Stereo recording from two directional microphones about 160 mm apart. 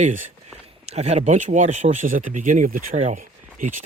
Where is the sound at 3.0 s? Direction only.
55° right (ahead or behind).